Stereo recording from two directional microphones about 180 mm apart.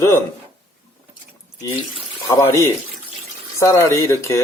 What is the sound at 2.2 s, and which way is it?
Speech, 15° left (ahead or behind).